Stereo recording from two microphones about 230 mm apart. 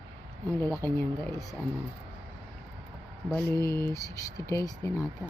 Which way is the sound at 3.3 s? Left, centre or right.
Centre.